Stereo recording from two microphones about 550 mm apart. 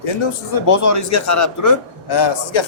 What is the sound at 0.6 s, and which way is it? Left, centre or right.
Speech, left.